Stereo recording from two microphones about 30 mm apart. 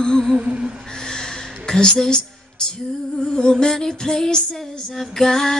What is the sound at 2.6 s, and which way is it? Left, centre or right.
Female singing, left.